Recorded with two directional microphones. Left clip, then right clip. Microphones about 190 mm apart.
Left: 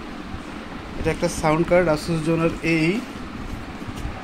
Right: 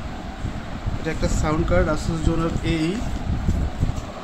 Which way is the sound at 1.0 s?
15° left (ahead or behind).